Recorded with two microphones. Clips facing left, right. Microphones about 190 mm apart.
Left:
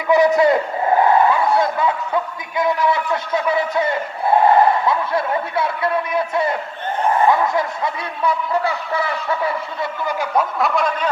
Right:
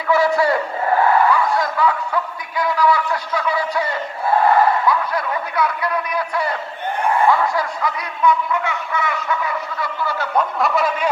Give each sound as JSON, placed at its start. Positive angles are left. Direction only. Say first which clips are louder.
{"t": 0.1, "sound": "a man's voice", "louder": "left 3 dB", "side_deg": 20}
{"t": 10.0, "sound": "snicker", "louder": "left 1 dB", "side_deg": 15}
{"t": 10.6, "sound": "speech", "louder": "even", "side_deg": -5}